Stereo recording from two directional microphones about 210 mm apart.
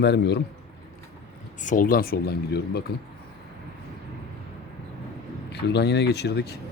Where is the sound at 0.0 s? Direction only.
55° left (ahead or behind).